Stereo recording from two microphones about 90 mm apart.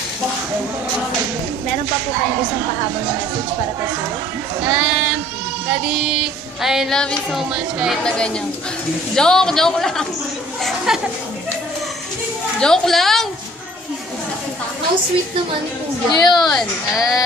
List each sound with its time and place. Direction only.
4.6 s speech: 10° right (ahead or behind)
5.9 s female singing: 5° right (ahead or behind)
7.0 s speech: 10° left (ahead or behind)
7.3 s female singing: 5° right (ahead or behind)
9.1 s female singing: 5° left (ahead or behind)
10.9 s female singing: 5° right (ahead or behind)
12.5 s female singing: 5° left (ahead or behind)
16.1 s a woman's voice: 50° left (ahead or behind)
16.9 s a woman's voice: 40° left (ahead or behind)